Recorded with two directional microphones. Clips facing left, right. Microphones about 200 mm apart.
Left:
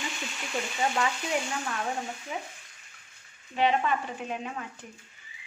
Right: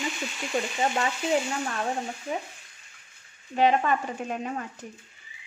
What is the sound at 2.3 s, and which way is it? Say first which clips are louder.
Speech: right 7 dB; 40° right (ahead or behind).